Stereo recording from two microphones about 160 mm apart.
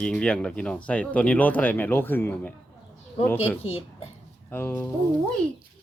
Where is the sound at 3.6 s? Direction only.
35° left (ahead or behind).